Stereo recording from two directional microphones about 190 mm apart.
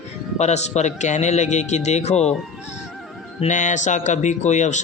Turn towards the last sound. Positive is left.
turn(degrees=40)  # may be behind; listen again after turning